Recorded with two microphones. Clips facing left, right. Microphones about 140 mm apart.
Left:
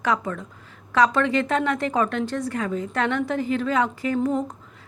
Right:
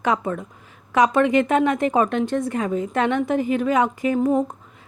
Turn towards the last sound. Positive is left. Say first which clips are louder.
# right 4 dB
turn(degrees=-20)  # may be behind; listen again after turning